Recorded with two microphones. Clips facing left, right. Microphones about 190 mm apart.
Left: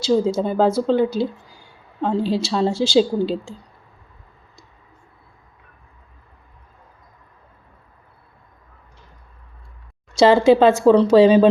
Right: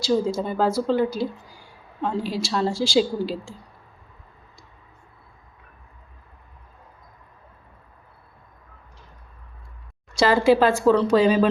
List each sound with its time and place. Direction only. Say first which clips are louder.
0.0 s a woman's voice: left 4 dB; 25° left (ahead or behind)
10.2 s a woman's voice: left 5 dB; 25° left (ahead or behind)